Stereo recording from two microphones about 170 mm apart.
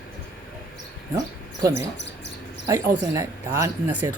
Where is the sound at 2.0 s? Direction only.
90° left.